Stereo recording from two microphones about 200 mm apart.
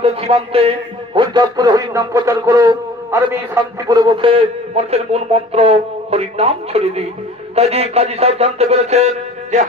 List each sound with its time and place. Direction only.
0.0 s a man's voice: 30° right (ahead or behind)